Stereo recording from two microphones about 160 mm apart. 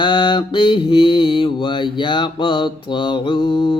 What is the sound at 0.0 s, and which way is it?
Mantra, 30° left (ahead or behind).